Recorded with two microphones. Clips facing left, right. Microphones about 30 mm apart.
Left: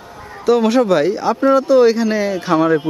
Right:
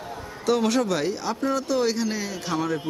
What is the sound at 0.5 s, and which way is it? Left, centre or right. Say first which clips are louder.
A man's voice: left 9 dB; centre.